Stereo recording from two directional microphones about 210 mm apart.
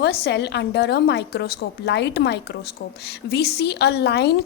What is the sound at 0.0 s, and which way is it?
A woman's voice, 50° left (ahead or behind).